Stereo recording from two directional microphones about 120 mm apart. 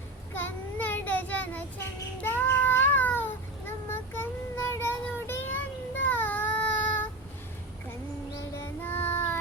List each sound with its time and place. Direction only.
0.3 s child singing: 15° left (ahead or behind)
8.6 s child singing: 15° left (ahead or behind)